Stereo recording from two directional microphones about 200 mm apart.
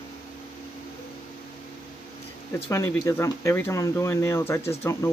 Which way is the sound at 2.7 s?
15° left (ahead or behind).